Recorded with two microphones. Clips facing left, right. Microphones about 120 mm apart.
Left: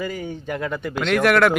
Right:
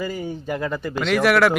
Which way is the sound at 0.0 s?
5° right (ahead or behind).